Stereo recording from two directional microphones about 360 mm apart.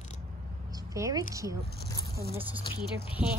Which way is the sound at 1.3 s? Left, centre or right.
Centre.